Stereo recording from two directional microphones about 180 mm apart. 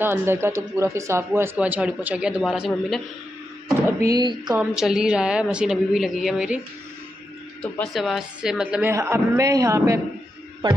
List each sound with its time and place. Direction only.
0.0 s speech: 10° right (ahead or behind)
3.6 s speech: 20° right (ahead or behind)
4.6 s a woman's voice: 5° right (ahead or behind)
7.6 s speech: 5° left (ahead or behind); by 9.9 s 15° right (ahead or behind)
10.6 s speech: 25° right (ahead or behind)